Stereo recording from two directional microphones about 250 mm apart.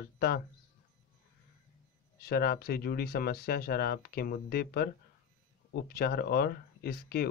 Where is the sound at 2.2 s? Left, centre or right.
Left.